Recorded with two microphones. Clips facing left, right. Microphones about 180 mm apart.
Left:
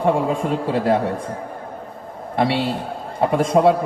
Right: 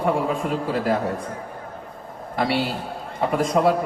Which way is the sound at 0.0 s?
30° left (ahead or behind).